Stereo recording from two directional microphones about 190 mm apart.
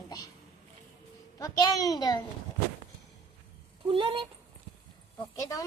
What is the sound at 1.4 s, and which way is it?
Speech, 20° left (ahead or behind).